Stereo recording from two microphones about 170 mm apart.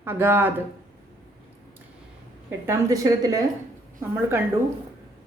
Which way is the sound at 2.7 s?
20° right (ahead or behind).